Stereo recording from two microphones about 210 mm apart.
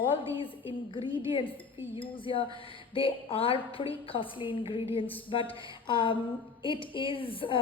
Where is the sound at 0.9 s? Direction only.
25° left (ahead or behind).